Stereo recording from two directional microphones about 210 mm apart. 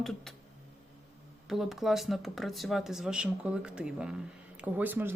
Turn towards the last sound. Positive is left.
turn(degrees=-10)  # may be behind; listen again after turning